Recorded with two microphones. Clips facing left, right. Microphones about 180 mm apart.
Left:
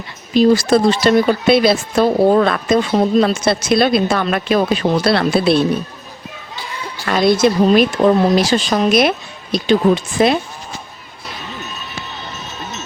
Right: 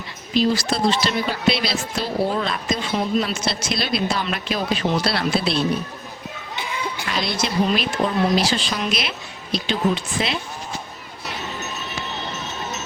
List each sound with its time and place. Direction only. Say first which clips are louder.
0.3 s speech: left 8 dB; 50° left (ahead or behind)
7.0 s speech: left 14 dB; 50° left (ahead or behind)